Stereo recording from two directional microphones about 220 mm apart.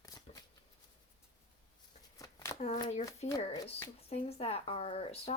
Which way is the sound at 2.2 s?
15° left (ahead or behind).